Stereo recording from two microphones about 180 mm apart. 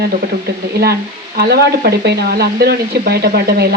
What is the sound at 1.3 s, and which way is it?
Speech, 60° right (ahead or behind).